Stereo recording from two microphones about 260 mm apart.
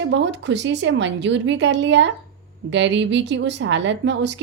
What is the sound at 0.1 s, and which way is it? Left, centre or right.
A woman's voice, right.